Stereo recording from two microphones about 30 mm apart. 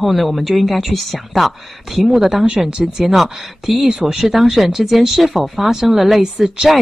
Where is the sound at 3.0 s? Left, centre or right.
Centre.